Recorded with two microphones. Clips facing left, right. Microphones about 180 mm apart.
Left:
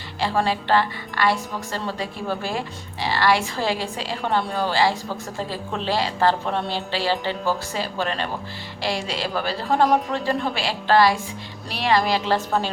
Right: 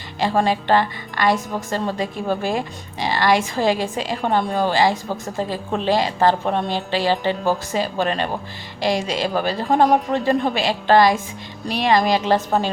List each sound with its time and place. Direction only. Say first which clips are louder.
0.2 s a woman's voice: right 3 dB; 15° right (ahead or behind)